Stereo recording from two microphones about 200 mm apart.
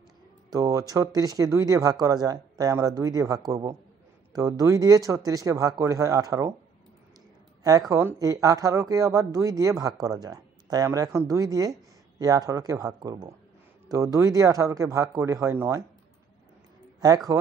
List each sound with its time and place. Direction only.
0.5 s speech: 15° right (ahead or behind)
7.9 s speech: 15° right (ahead or behind)
17.3 s speech: 15° right (ahead or behind)